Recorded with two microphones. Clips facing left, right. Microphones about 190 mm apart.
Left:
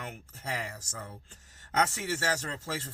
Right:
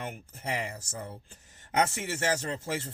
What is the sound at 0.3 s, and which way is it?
Speech, 20° right (ahead or behind).